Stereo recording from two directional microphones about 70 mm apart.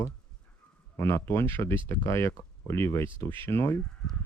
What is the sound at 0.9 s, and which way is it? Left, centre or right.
Speech, left.